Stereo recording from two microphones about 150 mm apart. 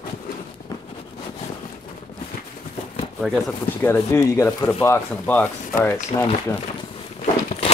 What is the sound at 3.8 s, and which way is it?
Speech, 15° left (ahead or behind).